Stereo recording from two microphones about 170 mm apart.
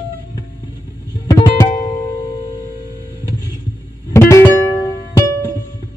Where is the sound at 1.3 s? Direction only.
20° left (ahead or behind).